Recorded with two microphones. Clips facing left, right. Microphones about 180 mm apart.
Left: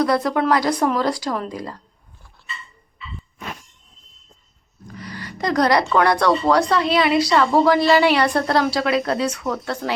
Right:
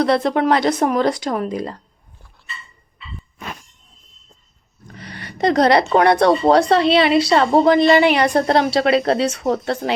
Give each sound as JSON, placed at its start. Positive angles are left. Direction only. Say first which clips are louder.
{"t": 0.0, "sound": "a woman's voice", "louder": "right 2 dB", "side_deg": -25}
{"t": 4.9, "sound": "a woman's voice", "louder": "right 4 dB", "side_deg": -25}